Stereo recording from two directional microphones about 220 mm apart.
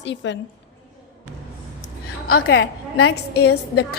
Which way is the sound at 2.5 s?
50° left (ahead or behind).